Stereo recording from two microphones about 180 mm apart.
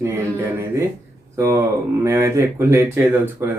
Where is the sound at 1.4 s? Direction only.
15° right (ahead or behind).